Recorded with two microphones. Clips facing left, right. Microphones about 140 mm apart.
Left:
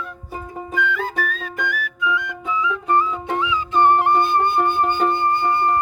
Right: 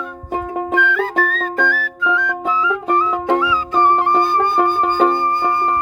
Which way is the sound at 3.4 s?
20° left (ahead or behind).